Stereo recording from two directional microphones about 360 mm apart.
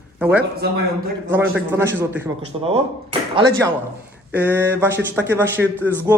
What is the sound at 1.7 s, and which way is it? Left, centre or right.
Speech, centre.